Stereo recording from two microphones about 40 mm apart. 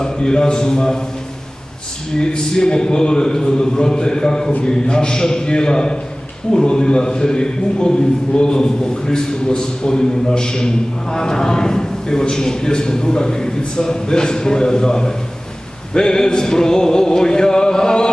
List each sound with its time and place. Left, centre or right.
0.0 s a man's voice: centre
2.1 s a man's voice: centre